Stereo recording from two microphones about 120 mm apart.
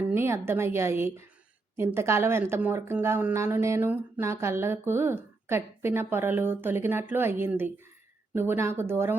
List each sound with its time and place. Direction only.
0.1 s speech: 20° right (ahead or behind)